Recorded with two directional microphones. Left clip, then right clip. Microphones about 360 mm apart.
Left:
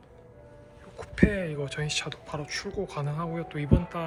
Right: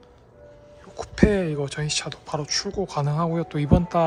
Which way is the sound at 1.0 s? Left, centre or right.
Centre.